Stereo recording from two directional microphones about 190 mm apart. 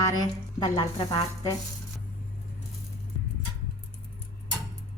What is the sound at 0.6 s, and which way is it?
Speech, 25° left (ahead or behind).